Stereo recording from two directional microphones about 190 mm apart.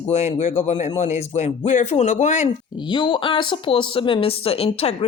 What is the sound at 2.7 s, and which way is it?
Speech, 25° left (ahead or behind).